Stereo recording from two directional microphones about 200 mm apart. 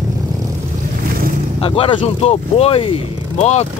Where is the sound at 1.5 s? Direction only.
25° left (ahead or behind).